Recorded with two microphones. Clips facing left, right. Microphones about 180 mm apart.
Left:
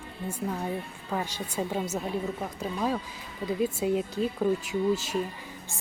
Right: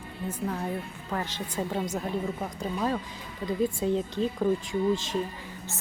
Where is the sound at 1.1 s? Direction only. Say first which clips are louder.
Left 1 dB; 10° left (ahead or behind).